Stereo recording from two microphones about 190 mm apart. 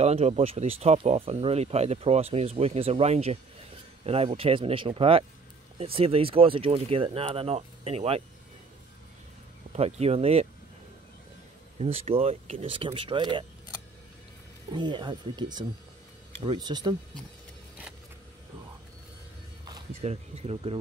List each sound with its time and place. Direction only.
0.0 s speech: 35° right (ahead or behind)
9.7 s speech: 35° right (ahead or behind)
11.8 s speech: 30° right (ahead or behind)
14.7 s speech: 25° right (ahead or behind)
19.9 s speech: 35° right (ahead or behind)